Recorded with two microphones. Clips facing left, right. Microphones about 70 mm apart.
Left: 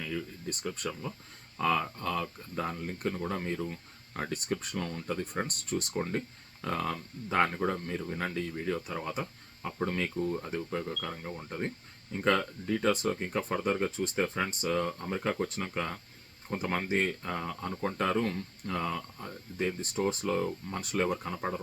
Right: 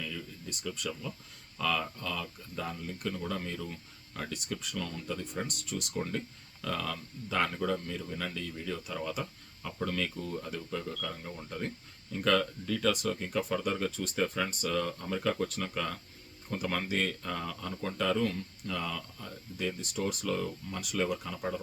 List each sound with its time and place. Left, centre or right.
0.0 s speech: left